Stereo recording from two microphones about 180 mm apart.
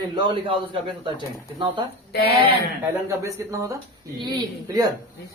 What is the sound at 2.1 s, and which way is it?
Speech, 60° left (ahead or behind).